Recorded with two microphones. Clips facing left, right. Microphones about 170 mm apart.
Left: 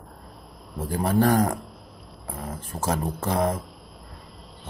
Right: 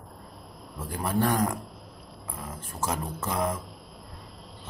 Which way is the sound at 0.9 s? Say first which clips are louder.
Left 5 dB; 35° left (ahead or behind).